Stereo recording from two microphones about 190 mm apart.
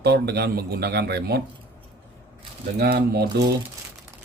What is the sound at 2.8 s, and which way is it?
Speech, 55° right (ahead or behind).